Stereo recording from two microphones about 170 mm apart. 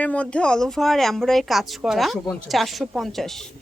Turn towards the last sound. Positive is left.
turn(degrees=0)  # may be behind; listen again after turning